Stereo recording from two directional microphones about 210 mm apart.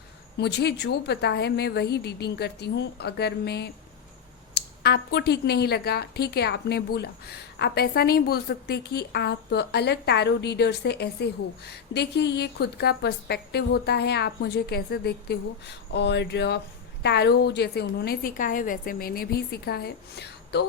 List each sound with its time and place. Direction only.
0.3 s a woman's voice: 50° left (ahead or behind)